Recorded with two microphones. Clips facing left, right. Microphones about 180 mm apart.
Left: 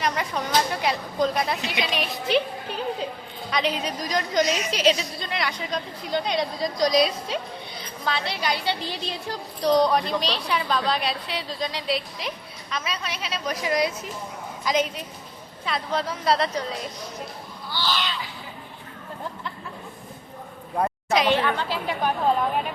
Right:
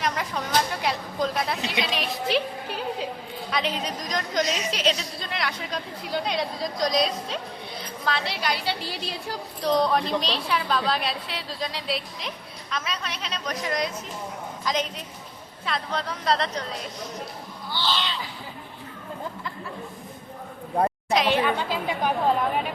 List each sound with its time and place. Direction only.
0.0 s a woman's voice: centre (ahead or behind)
17.7 s a sound: 25° right (ahead or behind)
21.1 s a woman's voice: centre (ahead or behind)
21.3 s a woman's voice: 10° right (ahead or behind)